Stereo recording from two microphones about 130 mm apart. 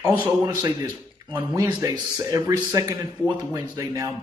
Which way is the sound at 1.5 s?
25° right (ahead or behind).